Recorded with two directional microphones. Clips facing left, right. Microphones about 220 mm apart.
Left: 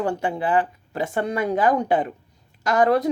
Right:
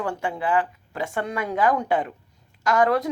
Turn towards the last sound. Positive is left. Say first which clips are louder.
# left 2 dB
turn(degrees=35)  # may be behind; listen again after turning